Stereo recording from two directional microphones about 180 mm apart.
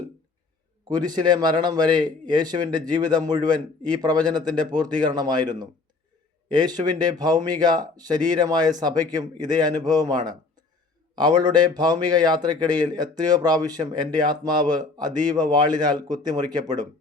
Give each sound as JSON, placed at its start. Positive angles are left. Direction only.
{"t": 0.9, "sound": "speech", "side_deg": -25}